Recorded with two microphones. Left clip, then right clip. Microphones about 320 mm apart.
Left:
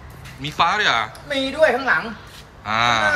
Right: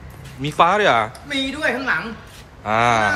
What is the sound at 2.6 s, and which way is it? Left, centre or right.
Speech, centre.